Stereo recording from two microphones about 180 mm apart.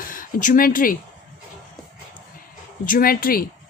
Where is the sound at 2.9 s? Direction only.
55° left (ahead or behind).